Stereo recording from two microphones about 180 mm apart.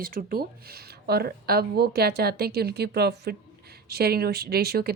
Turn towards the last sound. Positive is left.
turn(degrees=-60)  # may be behind; listen again after turning